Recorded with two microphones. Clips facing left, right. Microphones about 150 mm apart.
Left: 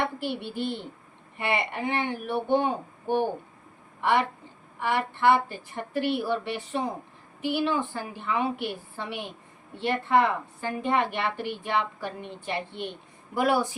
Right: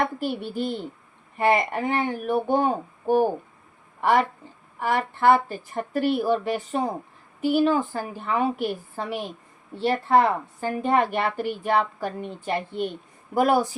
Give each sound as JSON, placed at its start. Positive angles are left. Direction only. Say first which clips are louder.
{"t": 0.0, "sound": "a child's voice", "louder": "right 4 dB", "side_deg": -40}